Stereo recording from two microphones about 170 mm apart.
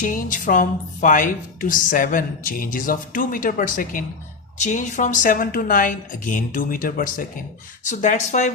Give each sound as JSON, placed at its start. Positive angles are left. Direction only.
{"t": 0.0, "sound": "a woman's voice", "side_deg": 50}